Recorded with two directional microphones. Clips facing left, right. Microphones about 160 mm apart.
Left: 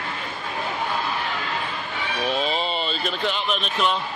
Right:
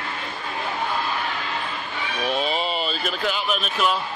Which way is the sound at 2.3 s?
5° right (ahead or behind).